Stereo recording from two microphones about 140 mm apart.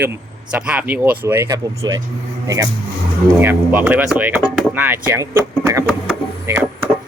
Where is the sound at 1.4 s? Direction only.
25° right (ahead or behind).